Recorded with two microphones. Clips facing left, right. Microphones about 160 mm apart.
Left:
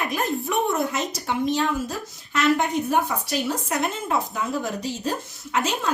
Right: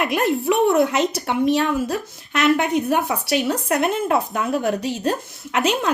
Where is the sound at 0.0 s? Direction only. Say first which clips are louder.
Right 6 dB; 70° right (ahead or behind).